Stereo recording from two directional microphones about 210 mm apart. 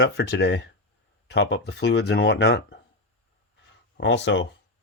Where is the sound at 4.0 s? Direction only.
60° left (ahead or behind).